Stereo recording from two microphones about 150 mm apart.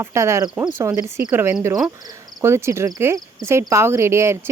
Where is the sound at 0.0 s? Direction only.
20° right (ahead or behind).